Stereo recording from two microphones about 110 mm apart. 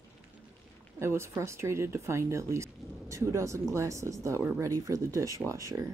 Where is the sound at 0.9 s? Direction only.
25° right (ahead or behind).